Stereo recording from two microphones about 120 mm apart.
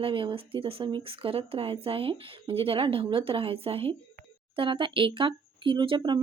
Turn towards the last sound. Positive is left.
turn(degrees=-45)  # may be behind; listen again after turning